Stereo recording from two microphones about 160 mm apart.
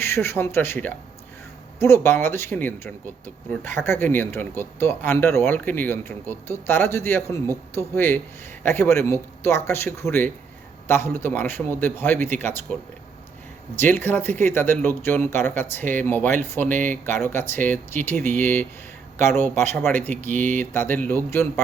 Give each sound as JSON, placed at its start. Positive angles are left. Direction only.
{"t": 0.0, "sound": "speech", "side_deg": 15}
{"t": 13.7, "sound": "speech", "side_deg": 15}